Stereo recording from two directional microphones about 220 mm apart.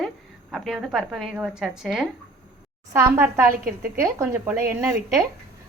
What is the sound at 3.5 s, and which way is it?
Speech, 40° right (ahead or behind).